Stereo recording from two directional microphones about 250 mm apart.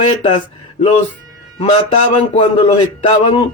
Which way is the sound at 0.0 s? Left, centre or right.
Left.